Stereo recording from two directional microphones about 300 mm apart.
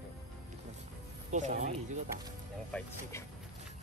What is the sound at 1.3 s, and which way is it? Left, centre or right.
Speech, right.